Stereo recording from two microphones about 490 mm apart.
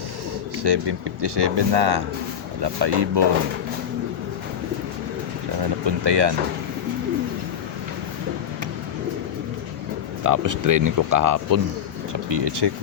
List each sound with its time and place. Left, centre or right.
0.6 s speech: right
5.8 s speech: right
10.2 s speech: right
12.3 s speech: right